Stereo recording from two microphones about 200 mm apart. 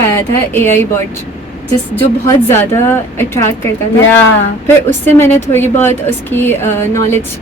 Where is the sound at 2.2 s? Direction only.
10° left (ahead or behind).